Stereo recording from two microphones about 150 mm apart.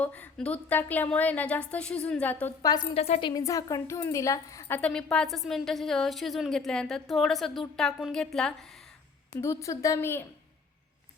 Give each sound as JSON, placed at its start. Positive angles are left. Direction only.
{"t": 0.0, "sound": "a woman's voice", "side_deg": 10}
{"t": 2.6, "sound": "a woman's voice", "side_deg": 30}
{"t": 2.9, "sound": "a woman's voice", "side_deg": 45}
{"t": 3.4, "sound": "a woman's voice", "side_deg": 20}
{"t": 4.8, "sound": "a woman's voice", "side_deg": 5}
{"t": 9.3, "sound": "a woman's voice", "side_deg": 20}